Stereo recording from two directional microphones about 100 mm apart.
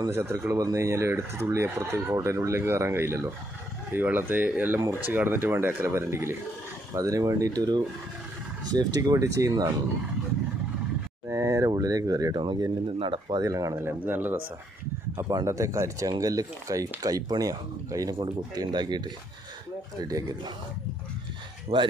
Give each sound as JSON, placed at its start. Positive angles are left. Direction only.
{"t": 0.1, "sound": "speech", "side_deg": -25}
{"t": 11.2, "sound": "a sound", "side_deg": -30}
{"t": 12.4, "sound": "speech", "side_deg": -55}
{"t": 13.4, "sound": "speech", "side_deg": -35}
{"t": 15.2, "sound": "speech", "side_deg": -35}
{"t": 20.0, "sound": "speech", "side_deg": -35}
{"t": 21.7, "sound": "speech", "side_deg": -80}